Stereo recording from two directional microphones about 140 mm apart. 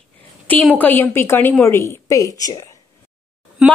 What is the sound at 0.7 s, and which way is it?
A woman's voice, 10° left (ahead or behind).